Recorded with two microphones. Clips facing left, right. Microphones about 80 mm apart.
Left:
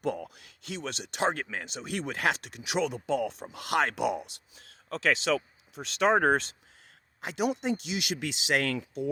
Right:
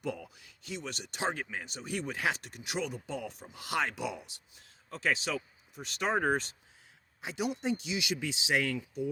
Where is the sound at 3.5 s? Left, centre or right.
Left.